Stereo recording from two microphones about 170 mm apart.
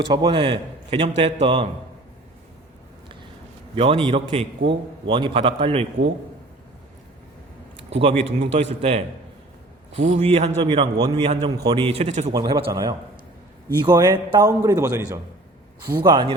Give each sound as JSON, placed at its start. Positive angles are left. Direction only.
{"t": 0.1, "sound": "a man's voice", "side_deg": -30}
{"t": 3.8, "sound": "a man's voice", "side_deg": -35}
{"t": 8.0, "sound": "a man's voice", "side_deg": -35}
{"t": 11.5, "sound": "a man's voice", "side_deg": -25}
{"t": 12.3, "sound": "a man's voice", "side_deg": -20}
{"t": 13.8, "sound": "a man's voice", "side_deg": -25}